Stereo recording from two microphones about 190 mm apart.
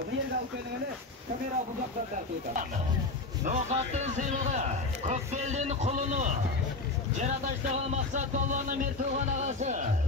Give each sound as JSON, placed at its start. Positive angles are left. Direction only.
{"t": 3.4, "sound": "a man's voice", "side_deg": -35}